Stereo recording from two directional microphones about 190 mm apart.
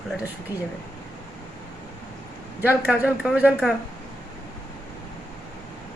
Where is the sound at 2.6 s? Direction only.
10° right (ahead or behind).